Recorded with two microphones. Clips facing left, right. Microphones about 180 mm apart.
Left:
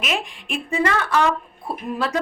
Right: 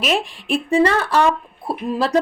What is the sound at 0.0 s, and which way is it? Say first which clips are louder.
A woman's voice: right 5 dB; 35° right (ahead or behind).